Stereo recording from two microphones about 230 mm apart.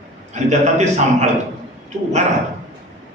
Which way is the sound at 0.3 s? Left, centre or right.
Right.